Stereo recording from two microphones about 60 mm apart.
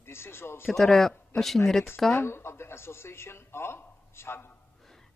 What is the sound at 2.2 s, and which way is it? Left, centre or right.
Speech, left.